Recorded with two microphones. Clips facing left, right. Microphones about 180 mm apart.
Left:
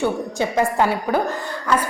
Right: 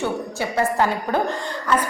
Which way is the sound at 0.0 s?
15° left (ahead or behind).